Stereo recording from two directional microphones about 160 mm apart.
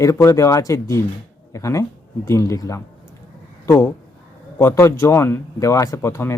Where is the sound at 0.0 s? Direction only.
20° left (ahead or behind).